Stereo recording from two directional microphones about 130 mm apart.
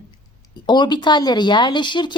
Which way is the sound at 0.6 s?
35° left (ahead or behind).